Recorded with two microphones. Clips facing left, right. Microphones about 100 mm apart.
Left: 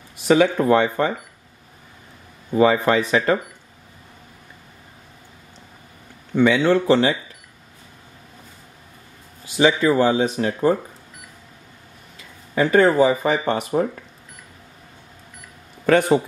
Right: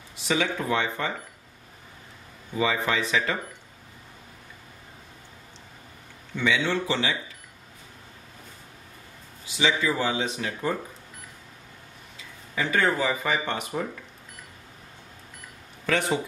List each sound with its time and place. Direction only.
0.3 s speech: 50° left (ahead or behind)
2.5 s speech: 50° left (ahead or behind)
6.3 s speech: 50° left (ahead or behind)
9.6 s speech: 50° left (ahead or behind)
12.5 s speech: 40° left (ahead or behind)
15.8 s speech: 50° left (ahead or behind)